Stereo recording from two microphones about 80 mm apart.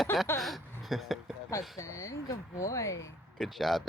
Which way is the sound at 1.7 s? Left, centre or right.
Left.